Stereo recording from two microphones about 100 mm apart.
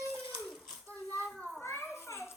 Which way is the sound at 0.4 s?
10° left (ahead or behind).